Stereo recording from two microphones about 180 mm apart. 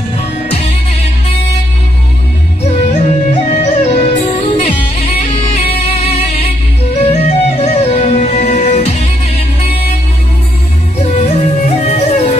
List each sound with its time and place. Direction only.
2.6 s music: 40° left (ahead or behind)
11.0 s music: 40° left (ahead or behind)